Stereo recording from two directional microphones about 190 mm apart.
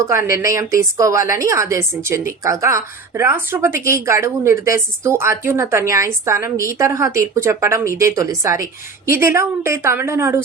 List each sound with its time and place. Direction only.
0.0 s a woman's voice: 15° right (ahead or behind)